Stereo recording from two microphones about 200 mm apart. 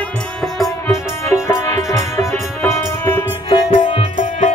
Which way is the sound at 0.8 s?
15° left (ahead or behind).